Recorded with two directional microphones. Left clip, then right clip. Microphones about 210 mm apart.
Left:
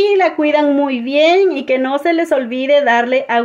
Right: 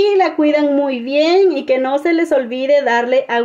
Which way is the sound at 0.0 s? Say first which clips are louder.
Left 1 dB; 10° right (ahead or behind).